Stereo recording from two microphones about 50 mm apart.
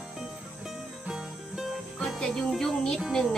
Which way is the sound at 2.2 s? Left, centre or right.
Centre.